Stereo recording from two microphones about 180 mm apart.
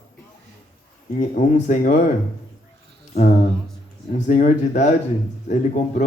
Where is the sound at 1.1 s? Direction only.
45° left (ahead or behind).